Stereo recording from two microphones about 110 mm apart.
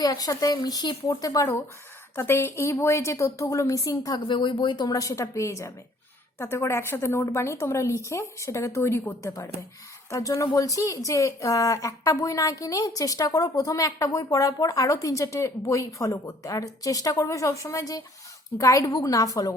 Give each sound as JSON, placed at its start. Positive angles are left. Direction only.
{"t": 0.0, "sound": "a woman's voice", "side_deg": 35}
{"t": 4.3, "sound": "a woman's voice", "side_deg": 45}